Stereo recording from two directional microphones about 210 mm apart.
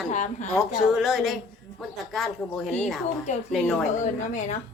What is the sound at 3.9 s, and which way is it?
Speech, 35° left (ahead or behind).